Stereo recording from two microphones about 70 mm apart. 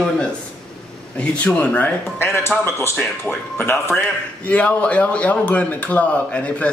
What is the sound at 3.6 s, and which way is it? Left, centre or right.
Speech, left.